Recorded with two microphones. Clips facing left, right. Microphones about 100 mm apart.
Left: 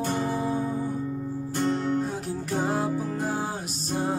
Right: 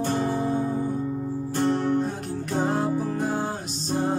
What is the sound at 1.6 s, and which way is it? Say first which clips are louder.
Music: right 3 dB; 35° right (ahead or behind).